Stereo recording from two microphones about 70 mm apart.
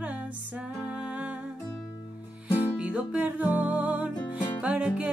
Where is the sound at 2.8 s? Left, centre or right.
Centre.